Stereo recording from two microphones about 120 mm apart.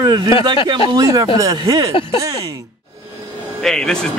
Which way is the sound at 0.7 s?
35° right (ahead or behind).